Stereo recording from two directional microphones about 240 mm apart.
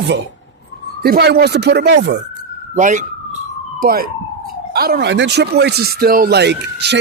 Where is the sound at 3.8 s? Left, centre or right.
Right.